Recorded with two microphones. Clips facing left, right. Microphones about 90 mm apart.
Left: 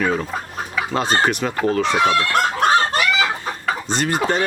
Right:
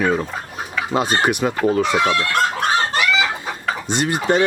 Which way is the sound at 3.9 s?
15° right (ahead or behind).